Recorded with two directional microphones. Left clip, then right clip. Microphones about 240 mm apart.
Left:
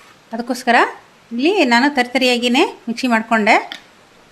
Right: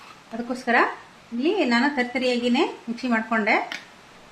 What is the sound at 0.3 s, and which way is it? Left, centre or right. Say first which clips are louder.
A woman's voice: left 7 dB; left.